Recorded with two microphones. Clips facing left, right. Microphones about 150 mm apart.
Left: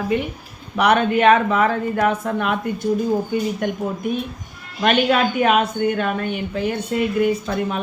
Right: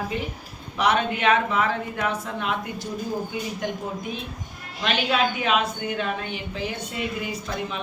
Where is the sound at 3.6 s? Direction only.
55° left (ahead or behind).